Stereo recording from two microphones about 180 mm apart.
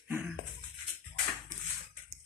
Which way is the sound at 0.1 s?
10° right (ahead or behind).